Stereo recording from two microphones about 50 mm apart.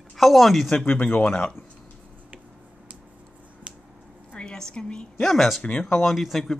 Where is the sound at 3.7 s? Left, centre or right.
Right.